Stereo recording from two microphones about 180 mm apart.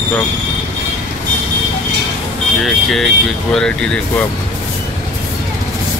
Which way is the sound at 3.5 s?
5° left (ahead or behind).